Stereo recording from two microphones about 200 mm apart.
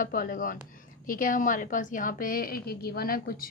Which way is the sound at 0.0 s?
45° left (ahead or behind).